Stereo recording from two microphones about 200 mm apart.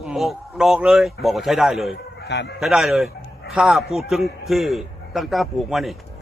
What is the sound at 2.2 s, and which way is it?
Speech, 55° left (ahead or behind).